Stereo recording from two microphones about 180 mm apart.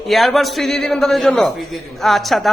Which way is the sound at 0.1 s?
Centre (ahead or behind).